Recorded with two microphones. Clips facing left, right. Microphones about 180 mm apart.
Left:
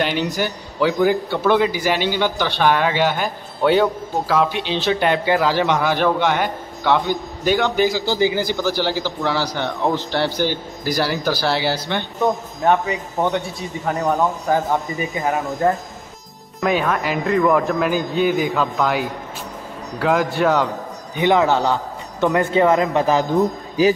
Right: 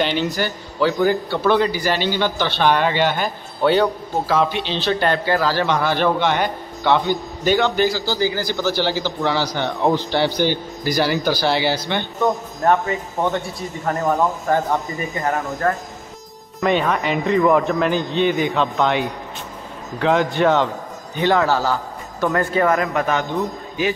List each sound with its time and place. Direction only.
0.0 s a man's voice: 5° left (ahead or behind)
4.7 s a man's voice: 15° left (ahead or behind)
8.0 s speech: 20° left (ahead or behind)
8.6 s speech: 10° left (ahead or behind)
21.2 s speech: 15° left (ahead or behind); by 23.9 s 35° left (ahead or behind)